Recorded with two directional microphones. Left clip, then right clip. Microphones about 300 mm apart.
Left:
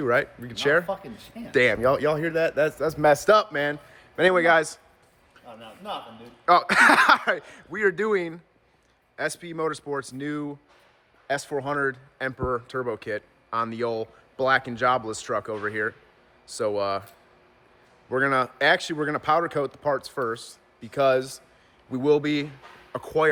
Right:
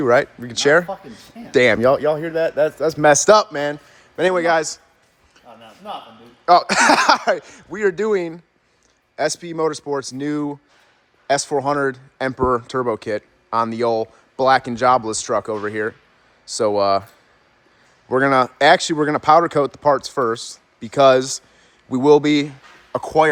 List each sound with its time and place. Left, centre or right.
0.0 s speech: centre
2.7 s speech: right
3.2 s speech: centre
18.1 s speech: right